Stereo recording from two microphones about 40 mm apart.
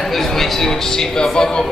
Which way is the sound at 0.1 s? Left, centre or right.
Centre.